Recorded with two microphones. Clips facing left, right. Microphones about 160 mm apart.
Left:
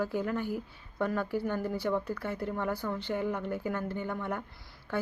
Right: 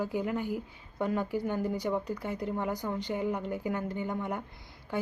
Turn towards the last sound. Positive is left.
turn(degrees=-15)  # may be behind; listen again after turning